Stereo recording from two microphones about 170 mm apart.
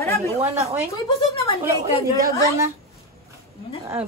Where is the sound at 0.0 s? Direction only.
15° left (ahead or behind).